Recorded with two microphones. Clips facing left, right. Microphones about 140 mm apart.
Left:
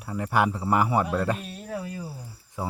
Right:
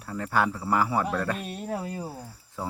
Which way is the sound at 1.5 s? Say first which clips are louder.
Right 2 dB; 30° right (ahead or behind).